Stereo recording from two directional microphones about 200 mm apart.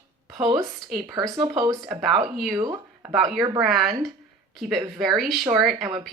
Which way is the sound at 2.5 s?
20° right (ahead or behind).